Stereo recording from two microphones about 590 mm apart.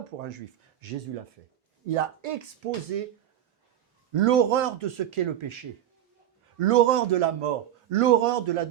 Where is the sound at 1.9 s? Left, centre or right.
Right.